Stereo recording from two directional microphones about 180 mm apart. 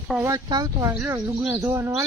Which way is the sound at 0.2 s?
20° right (ahead or behind).